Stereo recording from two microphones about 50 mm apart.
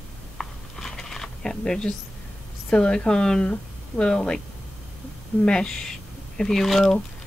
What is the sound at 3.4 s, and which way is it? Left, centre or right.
Speech, left.